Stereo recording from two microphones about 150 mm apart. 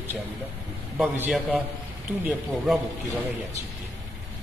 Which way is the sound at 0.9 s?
5° right (ahead or behind).